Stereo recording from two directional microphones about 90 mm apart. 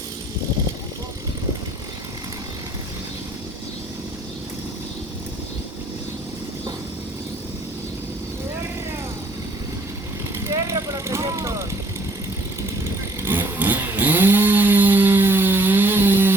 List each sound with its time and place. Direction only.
10.4 s vehicle: 35° right (ahead or behind)
13.2 s chainsaw: 25° right (ahead or behind)